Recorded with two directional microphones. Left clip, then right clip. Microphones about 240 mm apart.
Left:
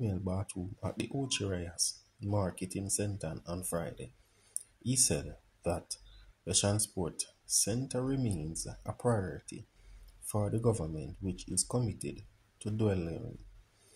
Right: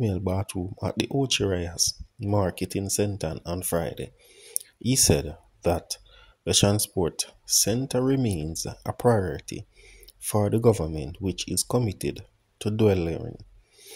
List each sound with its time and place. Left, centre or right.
0.0 s speech: right